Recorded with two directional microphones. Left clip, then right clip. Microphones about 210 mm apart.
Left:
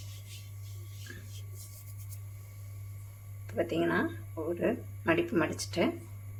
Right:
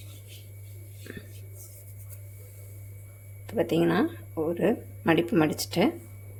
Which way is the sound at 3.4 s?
40° right (ahead or behind).